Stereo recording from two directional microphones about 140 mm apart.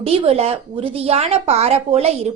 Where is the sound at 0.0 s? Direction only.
45° right (ahead or behind).